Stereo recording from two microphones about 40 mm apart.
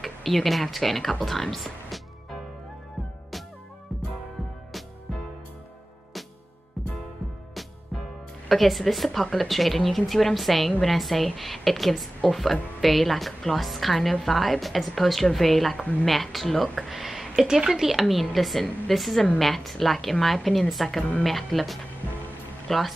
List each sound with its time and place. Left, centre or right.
0.0 s speech: centre
1.2 s music: centre
8.5 s a woman's voice: centre
15.8 s a woman's voice: left
16.1 s a woman's voice: centre
16.9 s a sound: centre
17.6 s a woman's voice: centre